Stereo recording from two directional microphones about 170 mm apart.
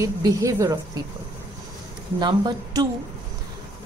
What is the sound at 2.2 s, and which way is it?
Speech, 25° right (ahead or behind).